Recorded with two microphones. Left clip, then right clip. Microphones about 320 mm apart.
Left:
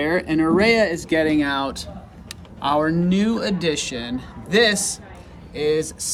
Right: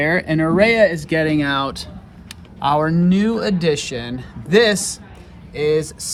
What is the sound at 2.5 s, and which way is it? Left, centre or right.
Speech, centre.